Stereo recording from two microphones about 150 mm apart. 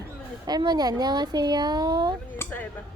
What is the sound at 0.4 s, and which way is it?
Speech, 25° right (ahead or behind).